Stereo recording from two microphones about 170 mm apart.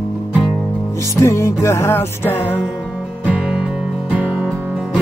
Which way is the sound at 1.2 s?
15° left (ahead or behind).